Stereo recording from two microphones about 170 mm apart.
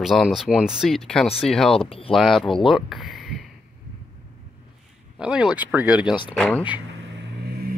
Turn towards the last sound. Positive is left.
turn(degrees=-65)  # may be behind; listen again after turning